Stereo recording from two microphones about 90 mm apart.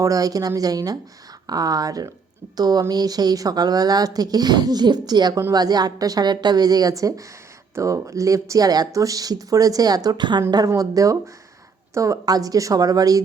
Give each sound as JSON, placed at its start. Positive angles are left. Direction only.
{"t": 0.0, "sound": "speech", "side_deg": -40}
{"t": 10.7, "sound": "speech", "side_deg": -40}